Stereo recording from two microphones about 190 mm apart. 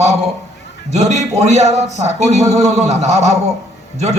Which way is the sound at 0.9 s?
35° right (ahead or behind).